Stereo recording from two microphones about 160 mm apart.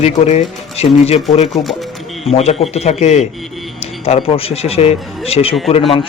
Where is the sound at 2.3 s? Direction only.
40° left (ahead or behind).